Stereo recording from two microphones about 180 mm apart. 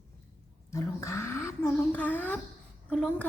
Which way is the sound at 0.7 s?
15° left (ahead or behind).